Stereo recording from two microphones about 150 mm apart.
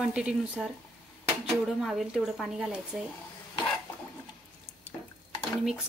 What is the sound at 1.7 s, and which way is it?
Speech, centre (ahead or behind).